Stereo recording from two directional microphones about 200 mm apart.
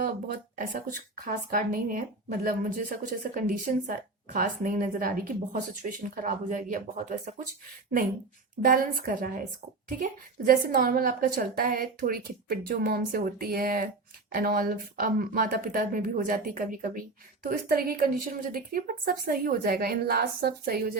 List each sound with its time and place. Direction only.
0.0 s speech: 45° right (ahead or behind)
8.6 s speech: 45° right (ahead or behind)